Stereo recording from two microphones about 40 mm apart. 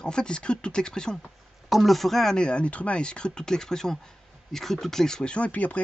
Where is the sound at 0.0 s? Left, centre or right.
Left.